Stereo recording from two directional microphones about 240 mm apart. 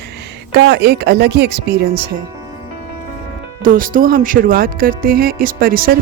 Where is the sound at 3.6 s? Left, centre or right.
Right.